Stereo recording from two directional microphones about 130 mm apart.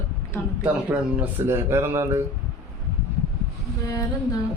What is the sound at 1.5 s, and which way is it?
Speech, 20° right (ahead or behind).